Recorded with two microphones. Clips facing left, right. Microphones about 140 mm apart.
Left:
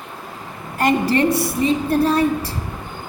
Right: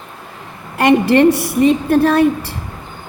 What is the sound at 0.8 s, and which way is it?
A woman's voice, 75° right (ahead or behind).